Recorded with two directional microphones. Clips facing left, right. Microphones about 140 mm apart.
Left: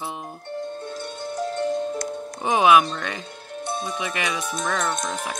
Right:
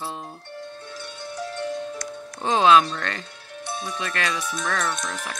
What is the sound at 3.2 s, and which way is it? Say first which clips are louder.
Music: left 4 dB; 50° left (ahead or behind).